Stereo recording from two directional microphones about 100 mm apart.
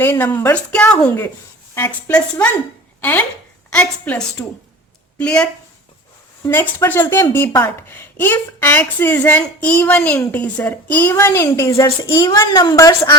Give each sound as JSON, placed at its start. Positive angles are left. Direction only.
{"t": 0.0, "sound": "a woman's voice", "side_deg": 20}
{"t": 0.7, "sound": "a woman's voice", "side_deg": 10}
{"t": 1.7, "sound": "a woman's voice", "side_deg": 25}
{"t": 6.4, "sound": "a woman's voice", "side_deg": 20}
{"t": 11.1, "sound": "a woman's voice", "side_deg": 25}